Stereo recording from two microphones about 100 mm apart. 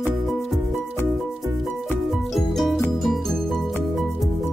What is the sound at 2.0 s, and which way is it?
Music, centre (ahead or behind).